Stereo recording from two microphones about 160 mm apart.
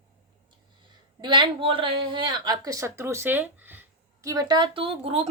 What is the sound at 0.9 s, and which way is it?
A woman's voice, 30° right (ahead or behind).